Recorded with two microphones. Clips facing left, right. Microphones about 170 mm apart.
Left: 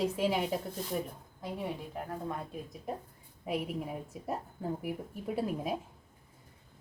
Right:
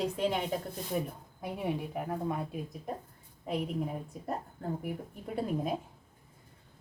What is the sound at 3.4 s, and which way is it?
A woman's voice, 5° left (ahead or behind).